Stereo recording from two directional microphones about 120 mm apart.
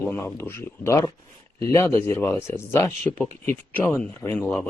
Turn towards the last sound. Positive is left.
turn(degrees=15)  # may be behind; listen again after turning